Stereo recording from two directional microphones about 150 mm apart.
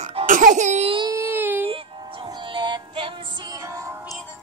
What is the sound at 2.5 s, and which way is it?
Music, 30° right (ahead or behind).